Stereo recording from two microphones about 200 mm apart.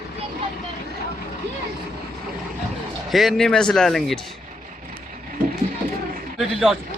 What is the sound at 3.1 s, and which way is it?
Speech, centre (ahead or behind).